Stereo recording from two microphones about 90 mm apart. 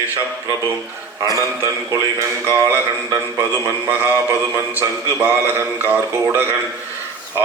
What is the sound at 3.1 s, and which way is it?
A man's voice, 35° right (ahead or behind).